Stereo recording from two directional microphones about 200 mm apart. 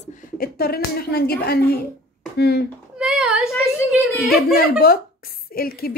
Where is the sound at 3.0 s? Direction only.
5° right (ahead or behind).